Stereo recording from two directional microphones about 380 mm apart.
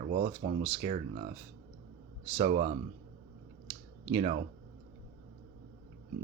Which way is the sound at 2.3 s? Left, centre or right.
Centre.